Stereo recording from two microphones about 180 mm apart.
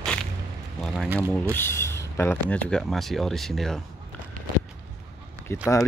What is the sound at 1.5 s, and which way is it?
Speech, 15° left (ahead or behind).